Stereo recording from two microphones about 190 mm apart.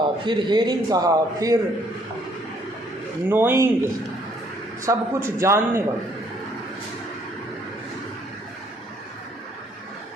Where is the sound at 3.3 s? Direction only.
10° right (ahead or behind).